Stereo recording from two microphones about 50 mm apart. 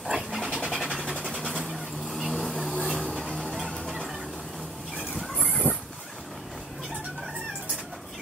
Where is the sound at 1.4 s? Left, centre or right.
Centre.